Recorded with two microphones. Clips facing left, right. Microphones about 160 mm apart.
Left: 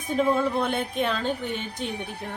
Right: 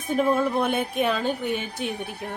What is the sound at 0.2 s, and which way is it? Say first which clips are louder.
Speech: right 1 dB; 10° right (ahead or behind).